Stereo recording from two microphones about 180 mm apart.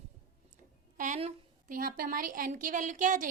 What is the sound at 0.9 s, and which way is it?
A woman's voice, 45° right (ahead or behind).